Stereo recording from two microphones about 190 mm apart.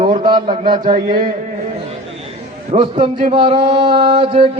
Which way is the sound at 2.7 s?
25° right (ahead or behind).